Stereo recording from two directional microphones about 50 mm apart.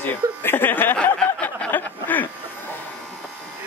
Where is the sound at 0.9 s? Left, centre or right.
Left.